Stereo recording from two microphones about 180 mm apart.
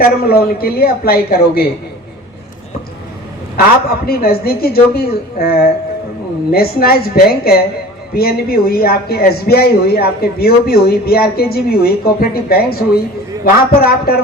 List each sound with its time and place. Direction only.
0.0 s speech: 55° left (ahead or behind)
3.8 s speech: 55° left (ahead or behind)